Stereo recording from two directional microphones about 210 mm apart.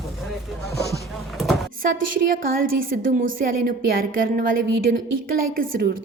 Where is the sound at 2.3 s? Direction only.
45° right (ahead or behind).